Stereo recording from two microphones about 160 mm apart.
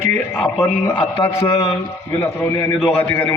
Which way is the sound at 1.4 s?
30° left (ahead or behind).